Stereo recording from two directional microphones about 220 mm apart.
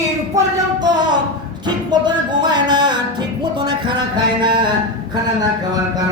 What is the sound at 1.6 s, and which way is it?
Music, 20° right (ahead or behind).